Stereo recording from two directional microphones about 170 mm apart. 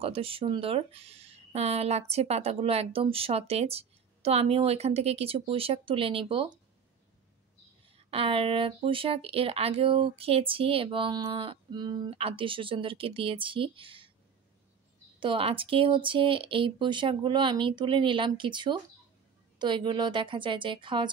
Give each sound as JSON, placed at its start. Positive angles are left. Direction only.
{"t": 0.0, "sound": "speech", "side_deg": -35}
{"t": 8.1, "sound": "speech", "side_deg": -30}
{"t": 15.1, "sound": "speech", "side_deg": -30}